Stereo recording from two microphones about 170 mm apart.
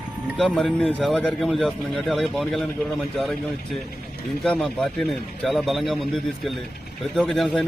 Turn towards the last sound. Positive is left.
turn(degrees=0)  # may be behind; listen again after turning